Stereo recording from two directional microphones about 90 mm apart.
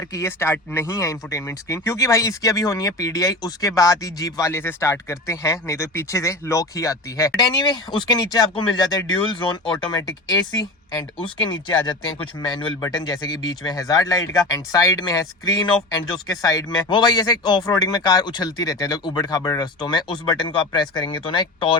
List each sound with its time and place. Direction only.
0.1 s speech: 30° left (ahead or behind)
7.6 s speech: 60° left (ahead or behind)
12.4 s speech: 70° left (ahead or behind)
12.8 s speech: 45° left (ahead or behind)
16.3 s speech: 40° left (ahead or behind)
19.0 s speech: 50° left (ahead or behind); by 21.8 s 75° left (ahead or behind)